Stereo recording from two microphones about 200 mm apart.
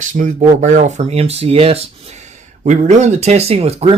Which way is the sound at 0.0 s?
40° right (ahead or behind).